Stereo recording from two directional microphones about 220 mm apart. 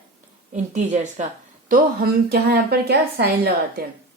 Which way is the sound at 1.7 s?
45° right (ahead or behind).